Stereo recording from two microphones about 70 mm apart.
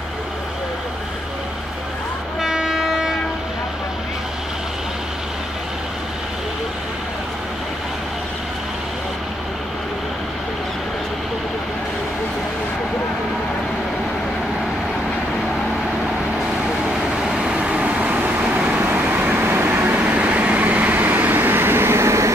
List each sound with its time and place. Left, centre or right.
2.4 s train: centre
17.2 s vehicle: centre; by 19.9 s right
19.9 s vehicle: centre; by 22.3 s right